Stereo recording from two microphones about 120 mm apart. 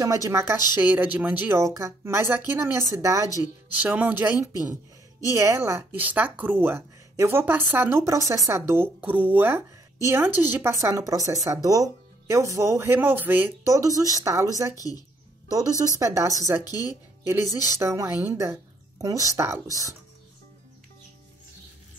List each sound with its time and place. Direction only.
0.0 s speech: 25° right (ahead or behind)
3.7 s speech: 10° right (ahead or behind)
14.8 s speech: 30° left (ahead or behind)
16.0 s speech: 25° right (ahead or behind)
17.6 s speech: 25° right (ahead or behind)